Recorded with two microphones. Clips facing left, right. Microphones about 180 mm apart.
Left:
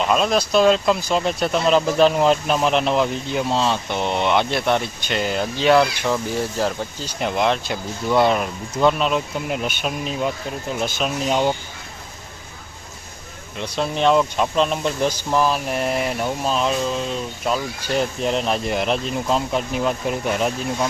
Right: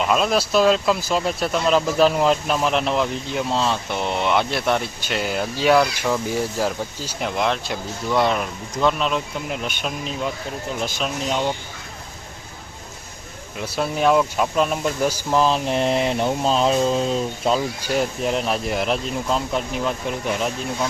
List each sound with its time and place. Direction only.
0.0 s speech: 5° right (ahead or behind)
11.3 s speech: 15° left (ahead or behind)
13.6 s speech: 5° right (ahead or behind); by 17.6 s 30° right (ahead or behind)
17.8 s speech: 5° right (ahead or behind)